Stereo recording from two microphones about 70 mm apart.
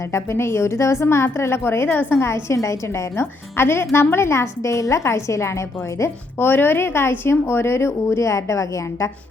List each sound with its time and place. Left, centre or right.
0.1 s a woman's voice: left
6.0 s speech: left